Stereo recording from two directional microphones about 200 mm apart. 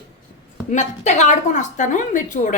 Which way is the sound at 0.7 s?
35° left (ahead or behind).